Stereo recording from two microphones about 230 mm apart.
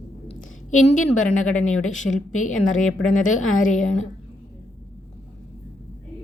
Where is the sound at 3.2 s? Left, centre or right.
Left.